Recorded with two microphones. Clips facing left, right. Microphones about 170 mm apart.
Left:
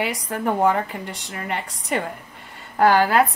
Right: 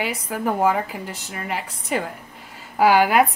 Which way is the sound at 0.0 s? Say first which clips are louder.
Left 1 dB; 5° right (ahead or behind).